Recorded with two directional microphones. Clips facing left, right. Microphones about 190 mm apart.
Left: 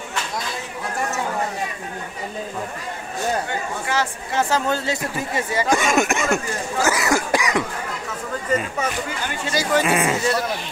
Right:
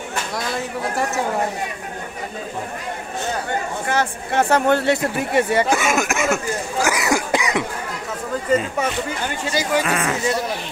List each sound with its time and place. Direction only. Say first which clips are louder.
3.8 s speech: right 2 dB; 55° right (ahead or behind)
5.7 s speech: left 1 dB; 5° right (ahead or behind); by 7.6 s 20° right (ahead or behind)
9.6 s speech: left 1 dB; 10° right (ahead or behind)
9.8 s speech: left 2 dB; 10° left (ahead or behind)